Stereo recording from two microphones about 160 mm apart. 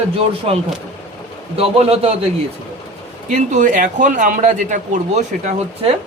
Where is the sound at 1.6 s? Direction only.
40° right (ahead or behind).